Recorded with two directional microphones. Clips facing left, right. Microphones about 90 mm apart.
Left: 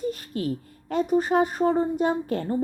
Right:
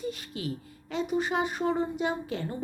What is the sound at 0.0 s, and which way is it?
Speech, 45° left (ahead or behind).